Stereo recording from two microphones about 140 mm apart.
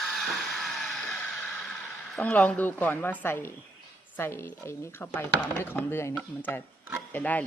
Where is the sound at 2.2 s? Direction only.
10° left (ahead or behind).